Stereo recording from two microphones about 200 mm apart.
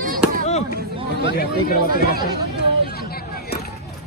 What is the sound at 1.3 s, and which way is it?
Speech, 50° left (ahead or behind).